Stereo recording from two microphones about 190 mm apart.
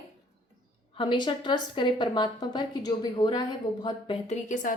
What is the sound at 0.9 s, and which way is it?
A woman's voice, 25° left (ahead or behind).